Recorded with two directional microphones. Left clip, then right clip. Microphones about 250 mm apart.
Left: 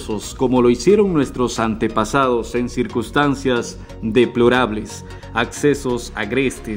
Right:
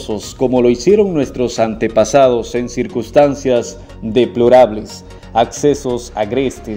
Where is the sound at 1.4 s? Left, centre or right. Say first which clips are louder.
Right 3 dB; left.